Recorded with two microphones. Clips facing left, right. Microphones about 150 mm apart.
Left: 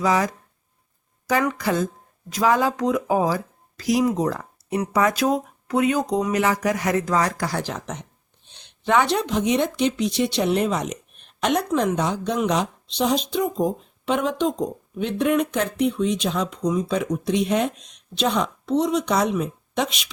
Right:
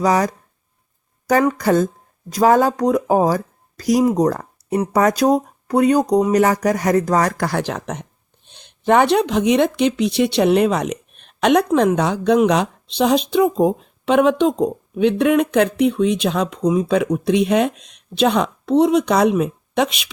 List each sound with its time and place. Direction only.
0.0 s speech: 40° right (ahead or behind)
1.5 s speech: 40° right (ahead or behind); by 20.1 s 60° right (ahead or behind)